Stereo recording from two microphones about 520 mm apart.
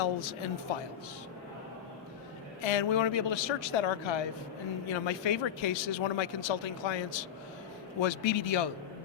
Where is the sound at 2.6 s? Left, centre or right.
Left.